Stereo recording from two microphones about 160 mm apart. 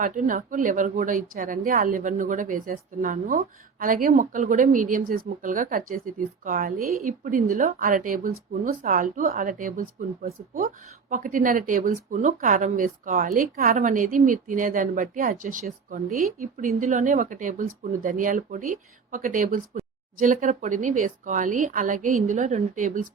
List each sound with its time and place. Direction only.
0.0 s speech: 55° right (ahead or behind)
11.1 s speech: 55° right (ahead or behind)